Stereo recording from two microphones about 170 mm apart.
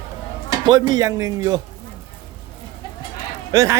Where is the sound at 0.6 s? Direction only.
25° right (ahead or behind).